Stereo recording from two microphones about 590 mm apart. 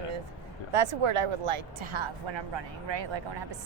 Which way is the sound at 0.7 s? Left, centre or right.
Right.